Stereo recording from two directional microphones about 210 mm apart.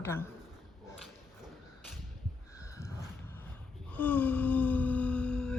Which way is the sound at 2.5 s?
15° left (ahead or behind).